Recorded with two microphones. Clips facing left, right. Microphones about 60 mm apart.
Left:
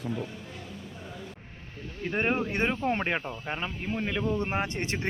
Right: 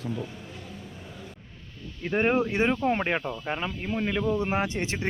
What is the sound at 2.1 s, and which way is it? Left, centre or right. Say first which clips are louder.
Speech: right 4 dB; centre.